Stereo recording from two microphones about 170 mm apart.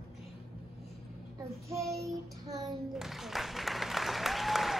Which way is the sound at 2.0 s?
20° right (ahead or behind).